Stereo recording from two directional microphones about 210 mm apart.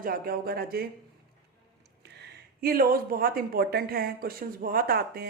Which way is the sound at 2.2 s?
45° right (ahead or behind).